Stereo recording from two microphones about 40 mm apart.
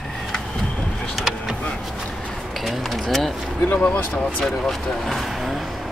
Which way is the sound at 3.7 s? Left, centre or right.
Left.